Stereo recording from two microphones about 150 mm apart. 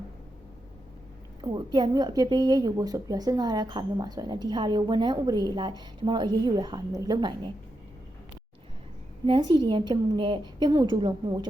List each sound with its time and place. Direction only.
1.4 s a woman's voice: 30° right (ahead or behind)
9.2 s a woman's voice: 30° right (ahead or behind)